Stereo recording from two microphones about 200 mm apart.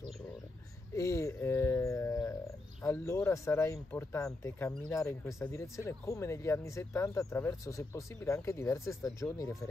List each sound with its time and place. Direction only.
0.9 s speech: 15° left (ahead or behind)